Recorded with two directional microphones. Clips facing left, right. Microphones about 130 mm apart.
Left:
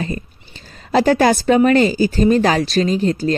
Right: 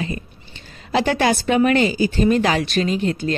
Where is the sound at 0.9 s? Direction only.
40° left (ahead or behind).